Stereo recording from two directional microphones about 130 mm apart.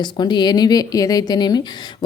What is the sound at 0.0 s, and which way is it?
A woman's voice, 35° left (ahead or behind).